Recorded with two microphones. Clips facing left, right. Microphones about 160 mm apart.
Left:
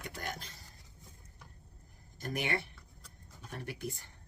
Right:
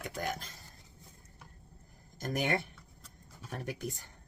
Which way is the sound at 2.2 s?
45° right (ahead or behind).